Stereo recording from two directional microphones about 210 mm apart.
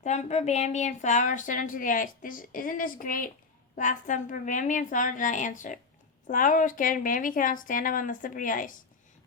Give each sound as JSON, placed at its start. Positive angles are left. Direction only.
{"t": 0.0, "sound": "a woman's voice", "side_deg": 35}